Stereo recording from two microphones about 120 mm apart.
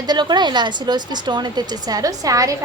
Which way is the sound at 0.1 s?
35° right (ahead or behind).